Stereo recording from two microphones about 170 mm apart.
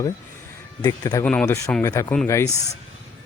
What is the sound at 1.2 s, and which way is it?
Speech, 5° left (ahead or behind).